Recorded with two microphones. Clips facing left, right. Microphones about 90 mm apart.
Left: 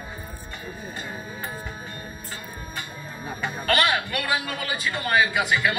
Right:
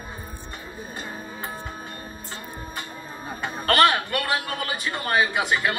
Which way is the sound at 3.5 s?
35° right (ahead or behind).